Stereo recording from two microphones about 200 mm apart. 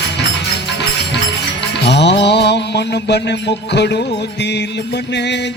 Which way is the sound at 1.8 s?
60° left (ahead or behind).